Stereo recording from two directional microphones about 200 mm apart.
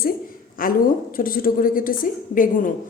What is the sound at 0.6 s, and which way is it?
A woman's voice, 45° left (ahead or behind).